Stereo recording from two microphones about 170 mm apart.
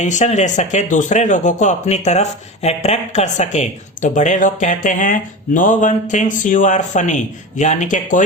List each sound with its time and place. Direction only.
0.0 s speech: 45° left (ahead or behind)